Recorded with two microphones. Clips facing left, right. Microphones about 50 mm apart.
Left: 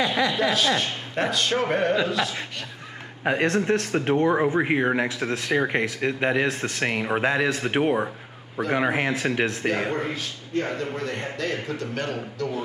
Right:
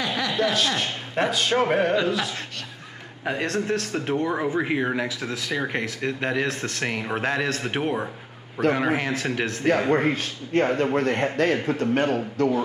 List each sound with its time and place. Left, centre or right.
0.3 s speech: centre
3.3 s speech: left
5.6 s a man's voice: left
9.9 s a man's voice: right